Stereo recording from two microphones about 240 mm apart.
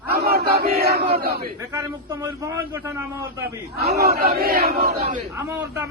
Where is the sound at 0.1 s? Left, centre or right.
Right.